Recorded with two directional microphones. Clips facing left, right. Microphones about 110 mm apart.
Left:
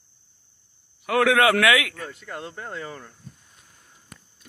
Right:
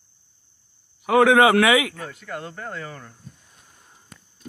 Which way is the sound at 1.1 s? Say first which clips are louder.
Right 4 dB; 20° right (ahead or behind).